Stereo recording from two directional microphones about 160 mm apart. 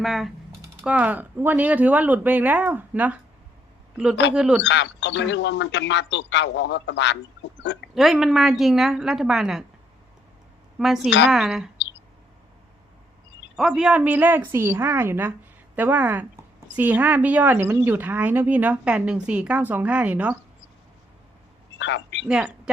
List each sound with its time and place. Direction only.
0.0 s a woman's voice: centre (ahead or behind)
4.6 s a man's voice: 90° left
7.9 s a woman's voice: centre (ahead or behind)
10.8 s a woman's voice: centre (ahead or behind)
13.6 s speech: 5° right (ahead or behind)
21.8 s a sound: 90° left
22.3 s speech: 5° right (ahead or behind)